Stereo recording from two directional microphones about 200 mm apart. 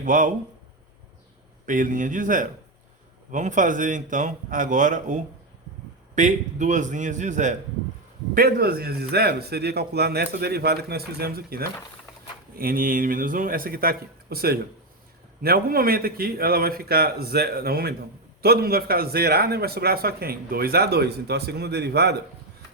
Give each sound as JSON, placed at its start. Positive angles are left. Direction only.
{"t": 0.0, "sound": "speech", "side_deg": -40}
{"t": 1.6, "sound": "speech", "side_deg": -40}
{"t": 8.4, "sound": "a man's voice", "side_deg": -50}